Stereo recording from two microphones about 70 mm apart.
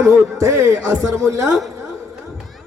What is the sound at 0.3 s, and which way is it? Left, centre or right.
Speech, right.